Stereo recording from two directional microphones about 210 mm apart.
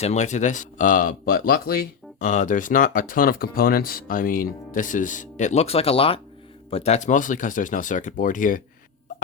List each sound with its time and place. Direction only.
0.0 s speech: 35° left (ahead or behind)